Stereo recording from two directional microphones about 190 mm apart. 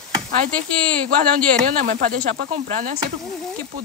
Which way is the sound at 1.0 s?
50° right (ahead or behind).